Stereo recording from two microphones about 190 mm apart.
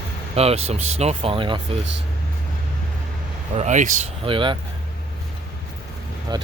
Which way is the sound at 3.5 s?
40° right (ahead or behind).